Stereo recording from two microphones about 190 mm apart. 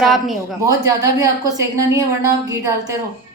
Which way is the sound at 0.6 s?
20° right (ahead or behind).